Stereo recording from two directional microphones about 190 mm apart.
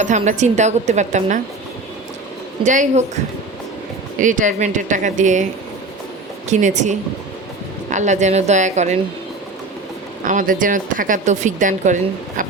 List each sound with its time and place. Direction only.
0.0 s a woman's voice: 40° right (ahead or behind)
2.6 s a woman's voice: 40° right (ahead or behind)
4.2 s a woman's voice: 40° right (ahead or behind)
6.5 s a woman's voice: 40° right (ahead or behind)
10.2 s a woman's voice: 45° right (ahead or behind)